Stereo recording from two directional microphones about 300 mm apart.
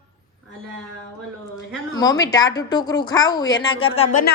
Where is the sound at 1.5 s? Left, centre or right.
Centre.